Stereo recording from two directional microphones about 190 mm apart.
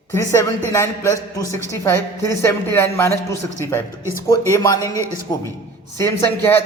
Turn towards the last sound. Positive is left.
turn(degrees=15)  # may be behind; listen again after turning